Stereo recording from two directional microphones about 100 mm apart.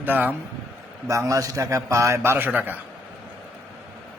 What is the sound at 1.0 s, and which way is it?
A man's voice, 35° right (ahead or behind).